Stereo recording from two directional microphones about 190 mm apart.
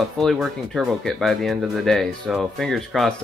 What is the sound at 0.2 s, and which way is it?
Speech, centre (ahead or behind).